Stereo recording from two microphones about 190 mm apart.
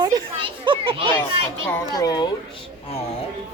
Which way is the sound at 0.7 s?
30° right (ahead or behind).